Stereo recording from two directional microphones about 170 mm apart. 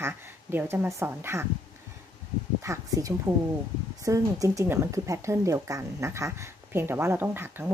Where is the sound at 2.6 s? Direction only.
20° right (ahead or behind).